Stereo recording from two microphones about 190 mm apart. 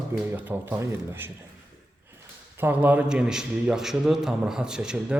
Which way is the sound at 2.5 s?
10° right (ahead or behind).